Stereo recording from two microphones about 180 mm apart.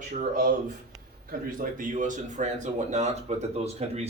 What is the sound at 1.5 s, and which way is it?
Speech, 50° right (ahead or behind).